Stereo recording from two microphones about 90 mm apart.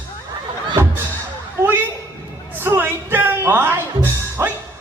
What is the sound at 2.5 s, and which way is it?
Music, 25° right (ahead or behind).